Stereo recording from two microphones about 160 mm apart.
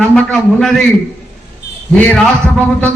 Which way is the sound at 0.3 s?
5° left (ahead or behind).